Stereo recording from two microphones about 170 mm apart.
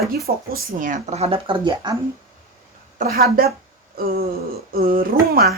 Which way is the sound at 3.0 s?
60° right (ahead or behind).